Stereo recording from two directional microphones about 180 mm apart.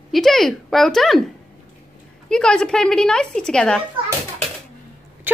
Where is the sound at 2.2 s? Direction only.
5° left (ahead or behind).